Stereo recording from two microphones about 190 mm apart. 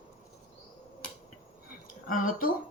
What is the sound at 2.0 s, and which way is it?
Speech, 45° left (ahead or behind).